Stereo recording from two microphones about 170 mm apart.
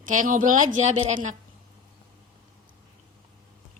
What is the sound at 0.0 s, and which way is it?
A woman's voice, 50° right (ahead or behind).